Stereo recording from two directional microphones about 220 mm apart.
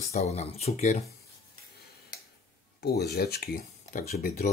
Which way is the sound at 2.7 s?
45° left (ahead or behind).